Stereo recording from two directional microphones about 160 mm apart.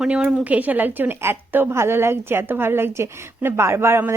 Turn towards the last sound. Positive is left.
turn(degrees=-15)  # may be behind; listen again after turning